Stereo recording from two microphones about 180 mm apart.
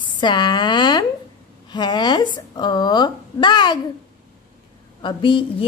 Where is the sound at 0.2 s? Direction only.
25° left (ahead or behind).